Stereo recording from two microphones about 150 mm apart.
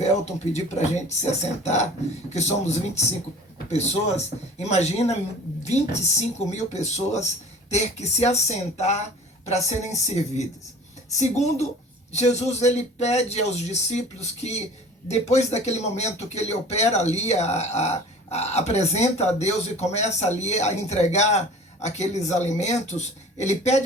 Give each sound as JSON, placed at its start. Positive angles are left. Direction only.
{"t": 0.0, "sound": "speech", "side_deg": 50}